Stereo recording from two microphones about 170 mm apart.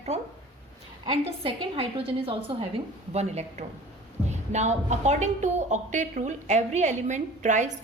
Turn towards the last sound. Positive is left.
turn(degrees=-45)  # may be behind; listen again after turning